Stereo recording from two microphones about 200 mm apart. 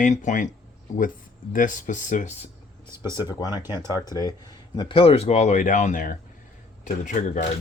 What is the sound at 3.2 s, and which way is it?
Speech, 20° left (ahead or behind).